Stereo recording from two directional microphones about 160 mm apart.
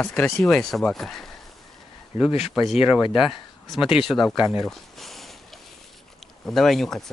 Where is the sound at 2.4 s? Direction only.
Centre (ahead or behind).